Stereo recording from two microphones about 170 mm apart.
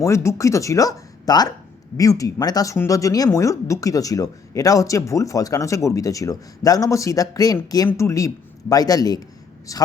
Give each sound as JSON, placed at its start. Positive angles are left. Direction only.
{"t": 0.0, "sound": "speech", "side_deg": 15}